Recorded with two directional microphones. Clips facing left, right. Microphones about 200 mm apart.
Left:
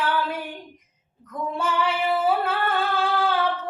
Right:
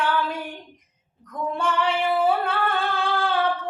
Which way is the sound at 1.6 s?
5° left (ahead or behind).